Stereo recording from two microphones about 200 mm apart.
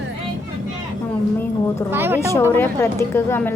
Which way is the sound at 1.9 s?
10° right (ahead or behind).